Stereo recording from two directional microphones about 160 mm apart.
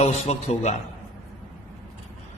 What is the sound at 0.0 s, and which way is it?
Speech, 45° left (ahead or behind).